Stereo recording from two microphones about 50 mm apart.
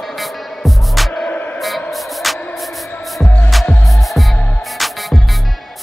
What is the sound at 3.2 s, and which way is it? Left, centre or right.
Music, left.